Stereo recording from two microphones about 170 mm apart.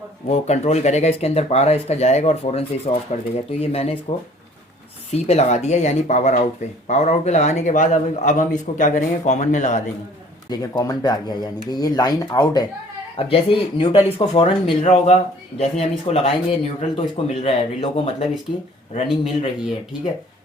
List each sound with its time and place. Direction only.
0.3 s speech: 40° left (ahead or behind)
5.1 s a man's voice: 40° left (ahead or behind)
10.5 s speech: 20° left (ahead or behind)
13.1 s speech: 30° left (ahead or behind)